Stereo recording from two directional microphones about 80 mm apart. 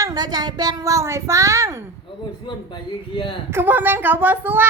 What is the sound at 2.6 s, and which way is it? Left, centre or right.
Speech, left.